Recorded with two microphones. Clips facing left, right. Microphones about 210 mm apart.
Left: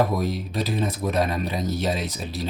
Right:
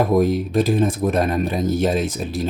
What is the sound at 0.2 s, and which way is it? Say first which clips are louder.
Speech: right 9 dB; 50° right (ahead or behind).